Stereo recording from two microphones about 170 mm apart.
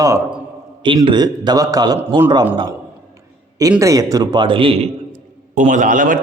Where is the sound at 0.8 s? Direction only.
30° right (ahead or behind).